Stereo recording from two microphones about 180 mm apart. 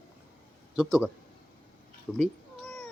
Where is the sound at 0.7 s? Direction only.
5° right (ahead or behind).